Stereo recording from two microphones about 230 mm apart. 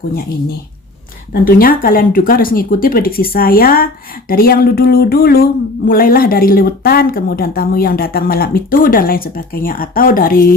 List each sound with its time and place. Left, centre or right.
1.3 s speech: left